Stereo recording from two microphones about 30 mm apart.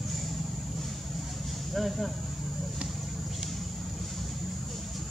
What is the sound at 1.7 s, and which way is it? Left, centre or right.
Speech, centre.